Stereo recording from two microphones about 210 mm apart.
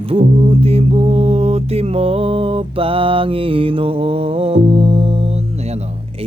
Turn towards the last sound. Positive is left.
turn(degrees=-30)  # may be behind; listen again after turning